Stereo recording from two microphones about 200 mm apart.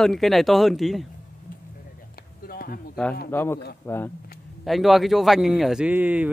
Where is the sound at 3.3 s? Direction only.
10° left (ahead or behind).